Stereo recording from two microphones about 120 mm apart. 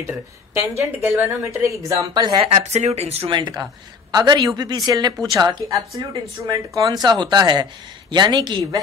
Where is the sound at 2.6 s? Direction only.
65° right (ahead or behind).